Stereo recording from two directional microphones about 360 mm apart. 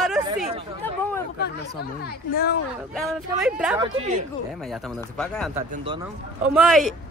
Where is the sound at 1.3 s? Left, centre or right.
Left.